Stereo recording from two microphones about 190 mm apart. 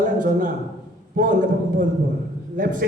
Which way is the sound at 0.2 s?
45° right (ahead or behind).